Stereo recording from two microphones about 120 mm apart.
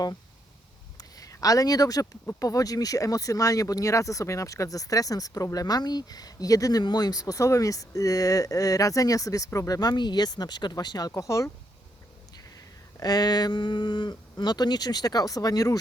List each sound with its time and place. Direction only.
0.9 s speech: 30° left (ahead or behind)
13.0 s speech: 35° left (ahead or behind)